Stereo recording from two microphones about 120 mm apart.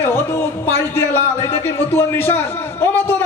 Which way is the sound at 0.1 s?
20° left (ahead or behind).